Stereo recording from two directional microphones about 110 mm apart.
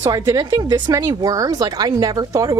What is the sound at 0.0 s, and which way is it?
Speech, 35° right (ahead or behind).